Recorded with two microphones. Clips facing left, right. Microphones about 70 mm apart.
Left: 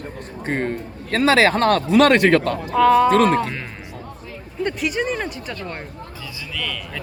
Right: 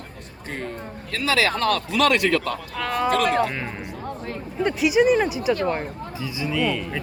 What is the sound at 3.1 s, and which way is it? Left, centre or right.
Speech, left.